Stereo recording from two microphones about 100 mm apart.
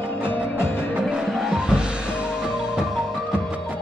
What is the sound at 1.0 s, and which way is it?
Music, centre (ahead or behind).